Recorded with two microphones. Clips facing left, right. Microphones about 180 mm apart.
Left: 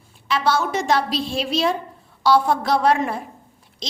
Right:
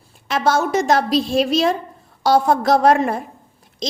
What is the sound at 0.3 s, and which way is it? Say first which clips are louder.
A woman's voice: right 3 dB; 45° right (ahead or behind).